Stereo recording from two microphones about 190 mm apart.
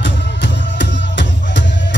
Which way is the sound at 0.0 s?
65° left (ahead or behind).